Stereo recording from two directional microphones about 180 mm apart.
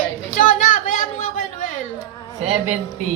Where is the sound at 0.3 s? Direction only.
45° left (ahead or behind).